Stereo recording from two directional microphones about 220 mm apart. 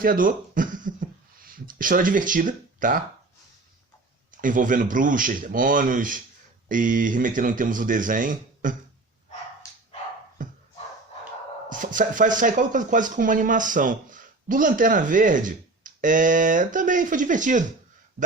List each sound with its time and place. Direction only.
0.0 s speech: 40° right (ahead or behind)
4.4 s speech: 35° right (ahead or behind)
10.4 s music: 35° right (ahead or behind)
11.7 s speech: 35° right (ahead or behind)